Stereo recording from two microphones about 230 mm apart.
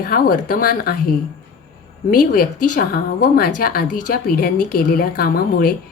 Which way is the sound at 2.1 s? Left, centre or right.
Left.